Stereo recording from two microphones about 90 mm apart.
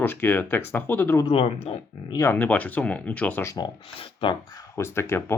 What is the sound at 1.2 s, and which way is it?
Speech, 90° left.